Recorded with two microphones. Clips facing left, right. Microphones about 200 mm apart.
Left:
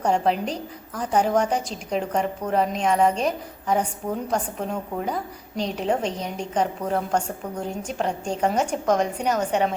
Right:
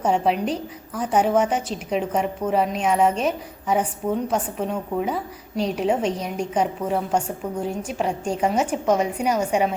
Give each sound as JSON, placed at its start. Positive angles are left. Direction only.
{"t": 0.0, "sound": "a woman's voice", "side_deg": -5}